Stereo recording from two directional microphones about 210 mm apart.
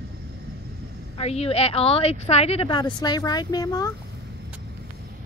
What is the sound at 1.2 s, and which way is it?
A woman's voice, 30° left (ahead or behind).